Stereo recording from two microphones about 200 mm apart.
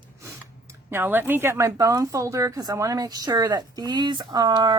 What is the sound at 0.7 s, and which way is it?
Speech, 10° right (ahead or behind).